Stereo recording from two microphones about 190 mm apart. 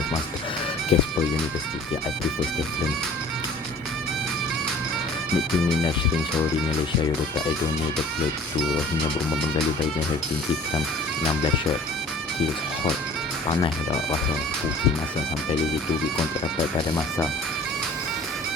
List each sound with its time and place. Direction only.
0.9 s music: 30° left (ahead or behind)